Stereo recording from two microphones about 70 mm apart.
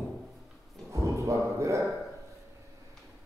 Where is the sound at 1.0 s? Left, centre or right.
Right.